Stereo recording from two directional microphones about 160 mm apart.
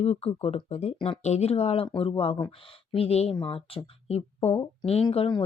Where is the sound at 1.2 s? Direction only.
45° left (ahead or behind).